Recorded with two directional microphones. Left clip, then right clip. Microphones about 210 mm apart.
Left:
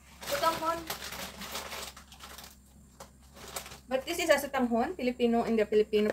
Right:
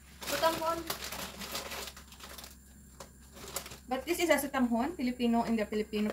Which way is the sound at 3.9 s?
25° left (ahead or behind).